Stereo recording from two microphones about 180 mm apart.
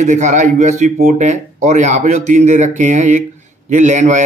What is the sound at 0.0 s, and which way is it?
A man's voice, 40° right (ahead or behind).